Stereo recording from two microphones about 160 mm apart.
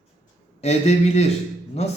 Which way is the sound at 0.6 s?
40° left (ahead or behind).